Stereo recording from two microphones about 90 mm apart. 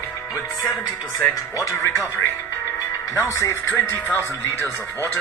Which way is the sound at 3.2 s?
30° left (ahead or behind).